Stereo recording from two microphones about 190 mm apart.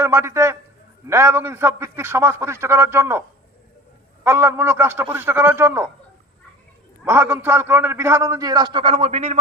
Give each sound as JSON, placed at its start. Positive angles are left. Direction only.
{"t": 0.0, "sound": "a man's voice", "side_deg": -15}
{"t": 7.0, "sound": "a man's voice", "side_deg": -10}